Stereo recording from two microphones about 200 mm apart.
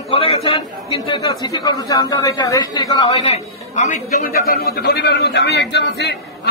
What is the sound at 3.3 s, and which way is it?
A man's voice, 35° left (ahead or behind).